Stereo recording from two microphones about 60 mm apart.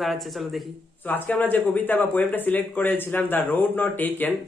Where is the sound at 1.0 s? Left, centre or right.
Left.